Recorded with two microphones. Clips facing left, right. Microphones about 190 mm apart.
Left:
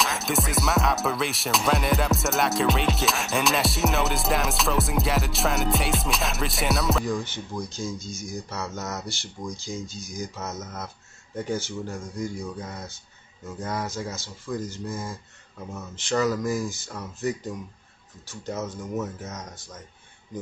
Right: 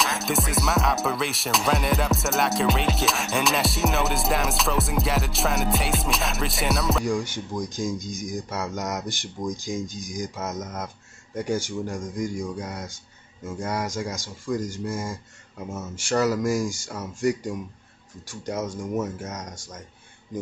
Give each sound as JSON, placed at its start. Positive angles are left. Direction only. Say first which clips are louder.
{"t": 0.0, "sound": "music", "louder": "right 1 dB", "side_deg": 0}
{"t": 7.1, "sound": "speech", "louder": "right 3 dB", "side_deg": -10}
{"t": 16.0, "sound": "speech", "louder": "right 2 dB", "side_deg": -10}